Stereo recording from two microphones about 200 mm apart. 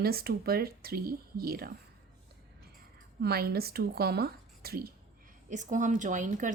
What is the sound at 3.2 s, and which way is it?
Speech, 50° right (ahead or behind).